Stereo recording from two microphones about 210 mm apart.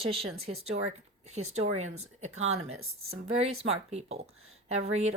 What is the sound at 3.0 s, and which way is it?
Speech, 30° right (ahead or behind).